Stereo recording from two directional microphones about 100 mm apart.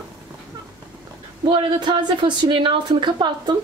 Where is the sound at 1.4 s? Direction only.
55° right (ahead or behind).